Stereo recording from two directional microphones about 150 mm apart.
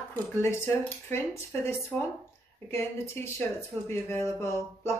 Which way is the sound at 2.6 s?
15° left (ahead or behind).